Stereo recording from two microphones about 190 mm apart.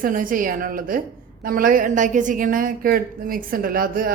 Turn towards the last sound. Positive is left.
turn(degrees=-50)  # may be behind; listen again after turning